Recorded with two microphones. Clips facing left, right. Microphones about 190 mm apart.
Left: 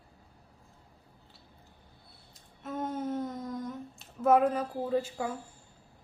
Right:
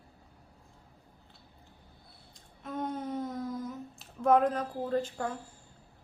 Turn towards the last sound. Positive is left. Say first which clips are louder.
# left 1 dB
turn(degrees=5)  # may be behind; listen again after turning